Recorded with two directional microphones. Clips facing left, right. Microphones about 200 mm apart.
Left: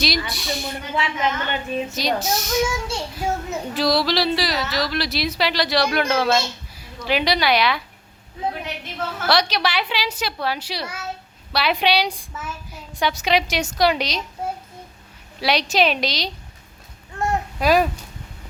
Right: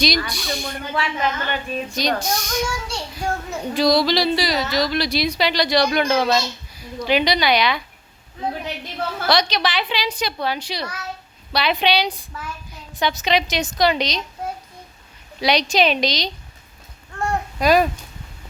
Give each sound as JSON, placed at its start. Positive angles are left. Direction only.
{"t": 0.3, "sound": "speech", "side_deg": 0}
{"t": 0.9, "sound": "speech", "side_deg": 20}
{"t": 1.9, "sound": "speech", "side_deg": 5}
{"t": 9.2, "sound": "a woman's voice", "side_deg": 5}
{"t": 15.4, "sound": "speech", "side_deg": 5}
{"t": 17.2, "sound": "a sound", "side_deg": 5}